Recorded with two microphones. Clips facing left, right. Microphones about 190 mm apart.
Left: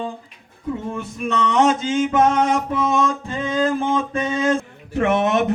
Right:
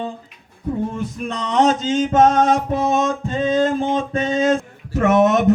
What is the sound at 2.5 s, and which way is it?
Music, 30° right (ahead or behind).